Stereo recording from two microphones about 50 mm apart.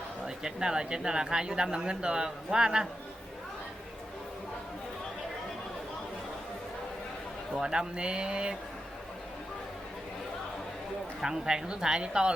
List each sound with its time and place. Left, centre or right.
0.3 s speech: centre
7.6 s speech: centre
11.2 s speech: centre